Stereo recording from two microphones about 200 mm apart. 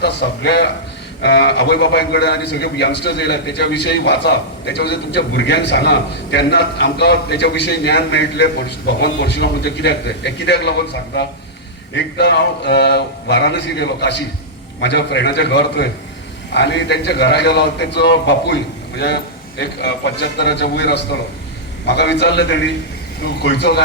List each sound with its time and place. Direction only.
0.0 s a man's voice: 55° left (ahead or behind)